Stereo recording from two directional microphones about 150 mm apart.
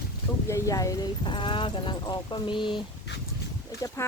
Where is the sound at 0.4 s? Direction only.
20° left (ahead or behind).